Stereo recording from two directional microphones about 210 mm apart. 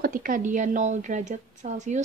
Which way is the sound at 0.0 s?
40° right (ahead or behind).